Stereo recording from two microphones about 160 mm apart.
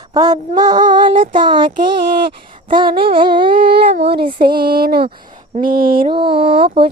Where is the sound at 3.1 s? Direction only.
30° right (ahead or behind).